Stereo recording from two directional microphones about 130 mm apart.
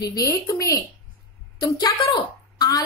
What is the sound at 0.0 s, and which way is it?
A woman's voice, 25° left (ahead or behind).